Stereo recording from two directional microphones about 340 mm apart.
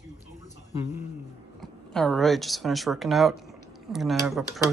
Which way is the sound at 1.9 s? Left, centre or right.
Centre.